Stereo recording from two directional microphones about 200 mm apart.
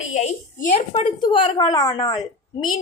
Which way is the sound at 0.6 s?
35° left (ahead or behind).